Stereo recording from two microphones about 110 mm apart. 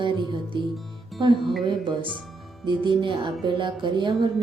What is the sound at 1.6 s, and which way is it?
Speech, 50° right (ahead or behind).